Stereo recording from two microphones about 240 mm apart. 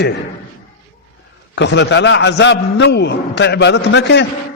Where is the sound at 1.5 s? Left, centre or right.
Left.